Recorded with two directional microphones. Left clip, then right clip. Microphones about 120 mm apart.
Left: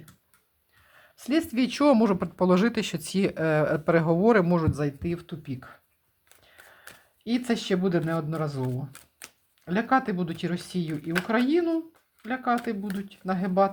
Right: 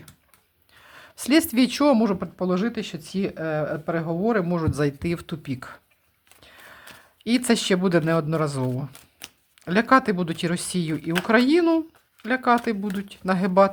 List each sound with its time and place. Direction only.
0.9 s a woman's voice: 45° right (ahead or behind)
1.8 s speech: centre (ahead or behind)
2.0 s speech: 15° left (ahead or behind)
4.7 s speech: 20° right (ahead or behind)
4.9 s speech: 45° right (ahead or behind)
6.4 s a sound: 35° right (ahead or behind)
7.3 s speech: 40° right (ahead or behind)
8.9 s typewriter: 5° right (ahead or behind)
9.6 s speech: 40° right (ahead or behind)